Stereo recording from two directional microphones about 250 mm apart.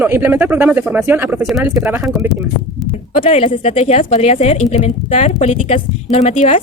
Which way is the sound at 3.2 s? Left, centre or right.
Left.